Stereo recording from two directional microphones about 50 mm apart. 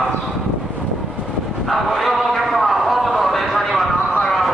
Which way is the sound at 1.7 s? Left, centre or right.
Centre.